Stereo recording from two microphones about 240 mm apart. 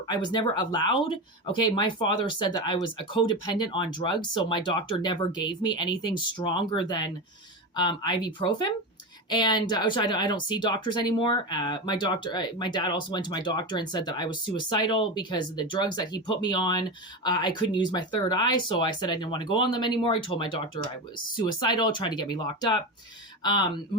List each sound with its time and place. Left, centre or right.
0.1 s speech: centre